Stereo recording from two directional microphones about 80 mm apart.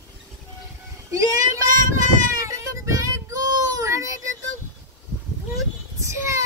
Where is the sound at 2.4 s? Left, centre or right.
Right.